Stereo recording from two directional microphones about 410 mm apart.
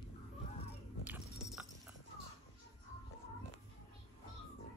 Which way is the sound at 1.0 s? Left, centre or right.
Centre.